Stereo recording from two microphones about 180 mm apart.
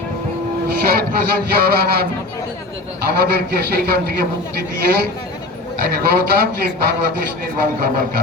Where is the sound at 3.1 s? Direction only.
60° right (ahead or behind).